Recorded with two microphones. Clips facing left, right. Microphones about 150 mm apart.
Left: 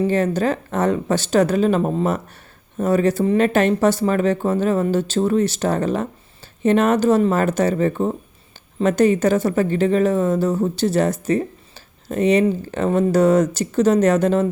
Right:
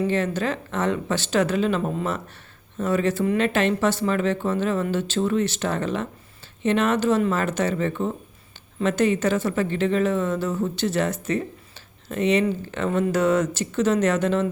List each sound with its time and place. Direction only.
0.1 s speech: 40° left (ahead or behind)